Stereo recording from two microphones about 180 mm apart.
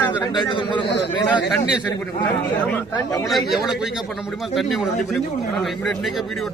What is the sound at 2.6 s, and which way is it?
Speech, 10° left (ahead or behind).